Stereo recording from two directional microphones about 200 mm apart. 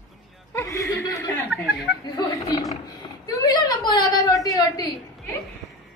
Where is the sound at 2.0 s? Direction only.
20° left (ahead or behind).